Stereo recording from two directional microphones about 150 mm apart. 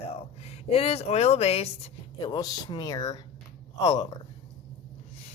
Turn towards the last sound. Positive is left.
turn(degrees=30)  # may be behind; listen again after turning